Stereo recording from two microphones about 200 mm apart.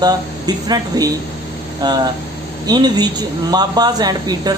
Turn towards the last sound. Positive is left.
turn(degrees=-20)  # may be behind; listen again after turning